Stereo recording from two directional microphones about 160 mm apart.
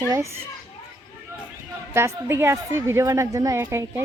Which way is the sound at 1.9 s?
15° right (ahead or behind).